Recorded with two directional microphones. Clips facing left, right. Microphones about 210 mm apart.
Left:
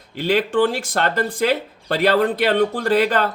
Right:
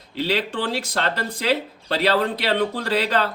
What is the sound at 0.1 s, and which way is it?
Speech, 50° left (ahead or behind).